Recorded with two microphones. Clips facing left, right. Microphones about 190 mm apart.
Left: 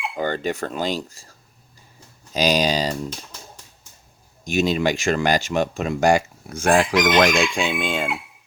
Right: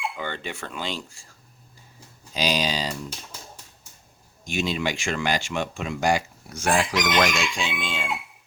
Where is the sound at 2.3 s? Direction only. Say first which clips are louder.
Left 6 dB; 45° left (ahead or behind).